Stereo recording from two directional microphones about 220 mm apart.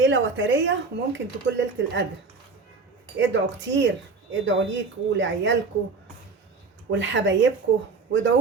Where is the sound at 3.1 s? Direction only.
55° right (ahead or behind).